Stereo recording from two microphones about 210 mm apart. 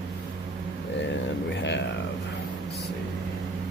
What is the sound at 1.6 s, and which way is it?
Speech, 55° left (ahead or behind).